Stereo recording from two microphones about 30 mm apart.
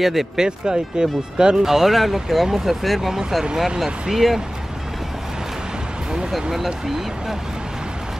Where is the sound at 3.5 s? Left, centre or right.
Centre.